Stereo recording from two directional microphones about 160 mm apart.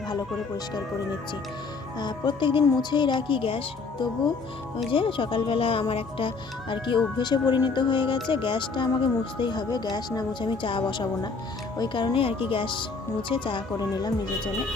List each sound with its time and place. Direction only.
2.0 s a woman's voice: 30° left (ahead or behind)
4.9 s a woman's voice: 35° left (ahead or behind)